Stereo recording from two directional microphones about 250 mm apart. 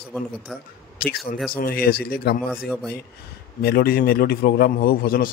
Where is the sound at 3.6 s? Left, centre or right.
Left.